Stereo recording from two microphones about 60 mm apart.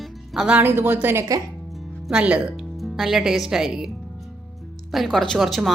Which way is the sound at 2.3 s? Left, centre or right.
Centre.